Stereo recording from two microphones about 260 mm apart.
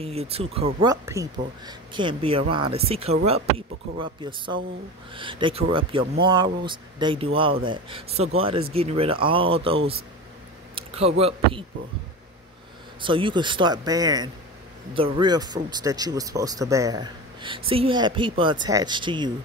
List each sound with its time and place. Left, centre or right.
0.0 s speech: right
13.0 s speech: centre